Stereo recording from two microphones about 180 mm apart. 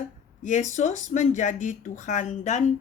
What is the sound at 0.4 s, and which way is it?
A woman's voice, 45° left (ahead or behind).